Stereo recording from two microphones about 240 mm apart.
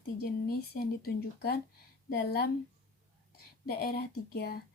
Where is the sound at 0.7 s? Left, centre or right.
Left.